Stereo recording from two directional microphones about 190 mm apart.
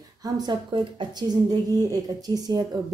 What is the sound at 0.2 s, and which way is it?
A woman's voice, 20° right (ahead or behind).